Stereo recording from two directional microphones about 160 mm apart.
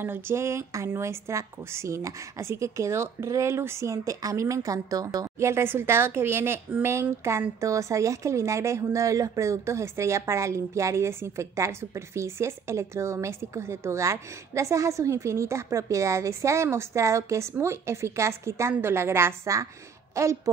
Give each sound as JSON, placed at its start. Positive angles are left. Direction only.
{"t": 0.0, "sound": "a woman's voice", "side_deg": -15}